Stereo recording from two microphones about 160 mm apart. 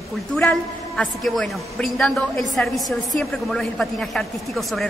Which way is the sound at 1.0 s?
Centre (ahead or behind).